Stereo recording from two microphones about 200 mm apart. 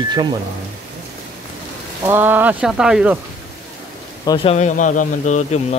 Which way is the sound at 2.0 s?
10° right (ahead or behind).